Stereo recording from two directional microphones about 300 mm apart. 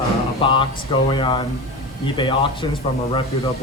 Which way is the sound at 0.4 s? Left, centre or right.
Centre.